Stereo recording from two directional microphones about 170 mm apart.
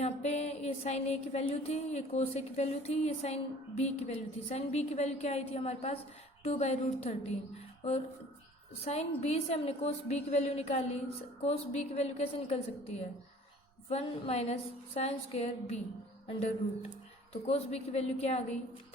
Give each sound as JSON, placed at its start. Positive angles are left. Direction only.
{"t": 0.0, "sound": "music", "side_deg": 40}
{"t": 17.4, "sound": "music", "side_deg": 40}